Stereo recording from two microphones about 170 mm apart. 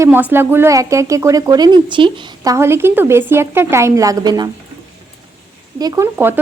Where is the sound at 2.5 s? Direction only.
15° right (ahead or behind).